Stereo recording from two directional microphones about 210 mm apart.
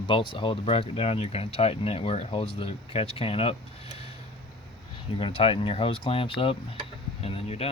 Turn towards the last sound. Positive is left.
turn(degrees=30)  # may be behind; listen again after turning